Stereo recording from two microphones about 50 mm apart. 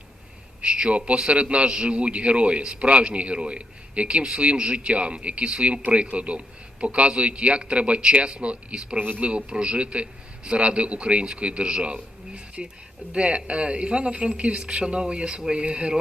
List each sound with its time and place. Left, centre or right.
0.6 s a man's voice: right
9.0 s speech: right
9.3 s a man's voice: right